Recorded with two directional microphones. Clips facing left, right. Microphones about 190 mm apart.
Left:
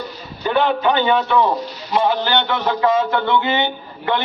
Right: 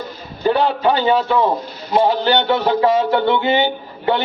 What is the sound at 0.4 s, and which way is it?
A man's voice, 35° right (ahead or behind).